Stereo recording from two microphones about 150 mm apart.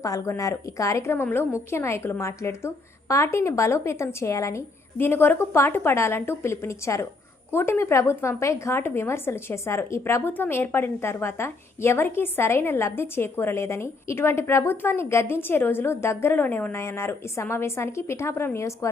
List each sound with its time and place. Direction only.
0.0 s a woman's voice: 20° left (ahead or behind)